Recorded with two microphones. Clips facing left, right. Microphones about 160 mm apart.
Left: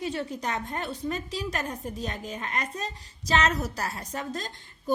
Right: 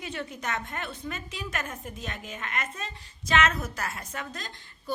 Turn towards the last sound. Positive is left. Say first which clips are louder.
# left 6 dB
turn(degrees=40)  # may be behind; listen again after turning